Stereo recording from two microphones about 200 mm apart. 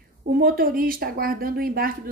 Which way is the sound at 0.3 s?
45° right (ahead or behind).